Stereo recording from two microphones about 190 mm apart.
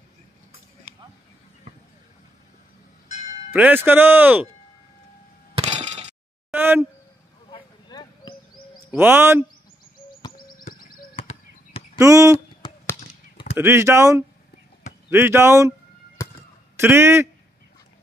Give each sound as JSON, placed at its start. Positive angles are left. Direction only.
{"t": 3.1, "sound": "music", "side_deg": 35}
{"t": 3.5, "sound": "speech", "side_deg": -10}
{"t": 5.5, "sound": "a sound", "side_deg": -35}
{"t": 6.5, "sound": "a sound", "side_deg": -10}
{"t": 7.5, "sound": "a sound", "side_deg": 25}
{"t": 8.9, "sound": "speech", "side_deg": -10}
{"t": 11.1, "sound": "basketball bounce", "side_deg": 30}
{"t": 12.0, "sound": "speech", "side_deg": -15}
{"t": 12.6, "sound": "chop", "side_deg": 25}
{"t": 13.6, "sound": "speech", "side_deg": -15}
{"t": 16.2, "sound": "a sound", "side_deg": 15}
{"t": 16.7, "sound": "a man's voice", "side_deg": -15}